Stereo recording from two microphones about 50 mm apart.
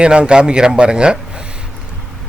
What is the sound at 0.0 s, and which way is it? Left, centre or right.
A man's voice, centre.